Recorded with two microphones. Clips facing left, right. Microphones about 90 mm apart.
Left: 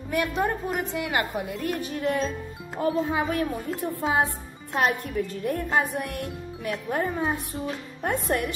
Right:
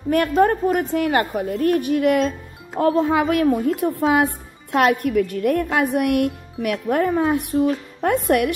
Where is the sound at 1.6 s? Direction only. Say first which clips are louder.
Right 12 dB; 60° right (ahead or behind).